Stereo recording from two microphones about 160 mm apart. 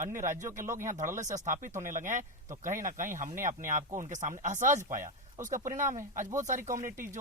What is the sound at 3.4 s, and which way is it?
Speech, 55° right (ahead or behind).